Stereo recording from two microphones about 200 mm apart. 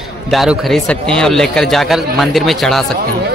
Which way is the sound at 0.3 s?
Centre (ahead or behind).